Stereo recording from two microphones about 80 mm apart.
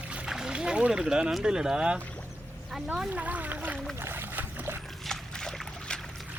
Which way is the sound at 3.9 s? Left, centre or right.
Right.